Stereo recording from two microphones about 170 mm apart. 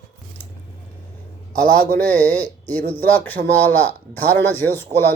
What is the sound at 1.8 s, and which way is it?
A man's voice, 10° left (ahead or behind).